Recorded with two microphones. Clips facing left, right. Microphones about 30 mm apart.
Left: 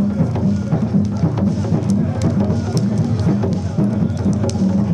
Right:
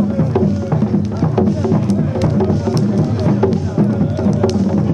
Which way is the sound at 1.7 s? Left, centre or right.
Centre.